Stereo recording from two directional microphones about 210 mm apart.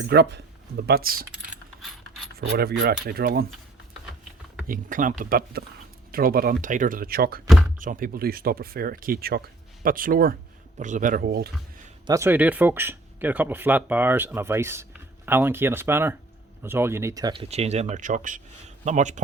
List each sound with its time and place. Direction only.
0.1 s speech: 50° right (ahead or behind)
2.4 s speech: 50° right (ahead or behind)
4.6 s speech: 40° right (ahead or behind)
7.4 s a sound: centre (ahead or behind)
7.8 s speech: 40° right (ahead or behind)
12.0 s speech: 15° right (ahead or behind); by 19.2 s 35° right (ahead or behind)